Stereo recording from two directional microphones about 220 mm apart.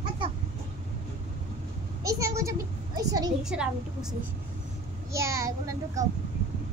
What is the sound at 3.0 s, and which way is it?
Speech, 15° right (ahead or behind).